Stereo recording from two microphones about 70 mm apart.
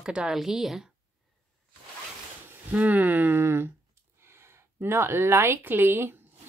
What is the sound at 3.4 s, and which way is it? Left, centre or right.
A woman's voice, right.